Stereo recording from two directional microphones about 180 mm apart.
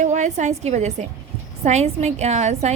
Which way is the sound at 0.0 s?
40° right (ahead or behind).